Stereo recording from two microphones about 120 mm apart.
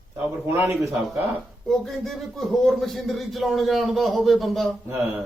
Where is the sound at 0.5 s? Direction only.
20° right (ahead or behind).